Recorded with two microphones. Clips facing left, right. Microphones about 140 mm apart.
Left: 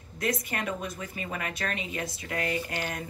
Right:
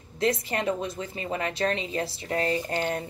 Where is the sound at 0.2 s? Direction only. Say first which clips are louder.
Right 5 dB; 25° right (ahead or behind).